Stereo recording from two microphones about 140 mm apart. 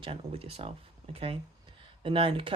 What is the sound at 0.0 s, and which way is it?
Speech, 40° right (ahead or behind).